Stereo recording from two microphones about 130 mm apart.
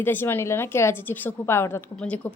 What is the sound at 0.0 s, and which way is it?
A woman's voice, 15° left (ahead or behind).